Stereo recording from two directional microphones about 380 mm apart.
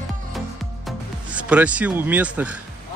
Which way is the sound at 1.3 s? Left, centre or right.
Centre.